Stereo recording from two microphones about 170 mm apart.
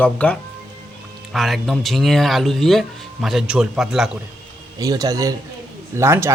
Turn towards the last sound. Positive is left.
turn(degrees=-15)  # may be behind; listen again after turning